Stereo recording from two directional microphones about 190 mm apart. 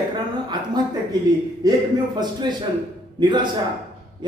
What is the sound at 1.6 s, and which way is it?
Speech, 20° right (ahead or behind).